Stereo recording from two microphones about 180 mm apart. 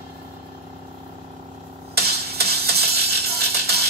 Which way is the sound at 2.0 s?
60° right (ahead or behind).